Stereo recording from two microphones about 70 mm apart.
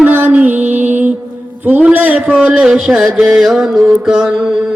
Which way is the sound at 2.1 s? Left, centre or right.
Centre.